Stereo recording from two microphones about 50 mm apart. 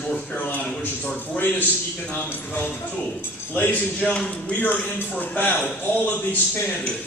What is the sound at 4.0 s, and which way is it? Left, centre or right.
Speech, left.